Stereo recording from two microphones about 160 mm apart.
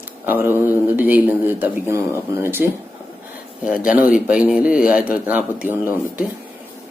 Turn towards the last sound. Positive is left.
turn(degrees=-10)  # may be behind; listen again after turning